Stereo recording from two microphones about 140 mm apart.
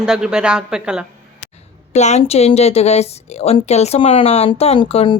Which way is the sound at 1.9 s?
55° left (ahead or behind).